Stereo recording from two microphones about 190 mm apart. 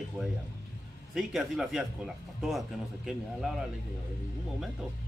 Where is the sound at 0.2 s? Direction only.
Centre (ahead or behind).